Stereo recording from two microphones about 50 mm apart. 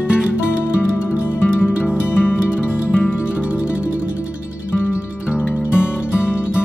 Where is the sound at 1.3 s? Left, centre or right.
Left.